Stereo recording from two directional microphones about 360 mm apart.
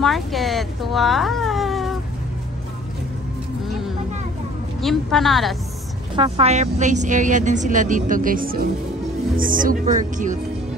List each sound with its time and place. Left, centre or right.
0.0 s speech: centre
4.8 s a woman's voice: centre
6.1 s a woman's voice: centre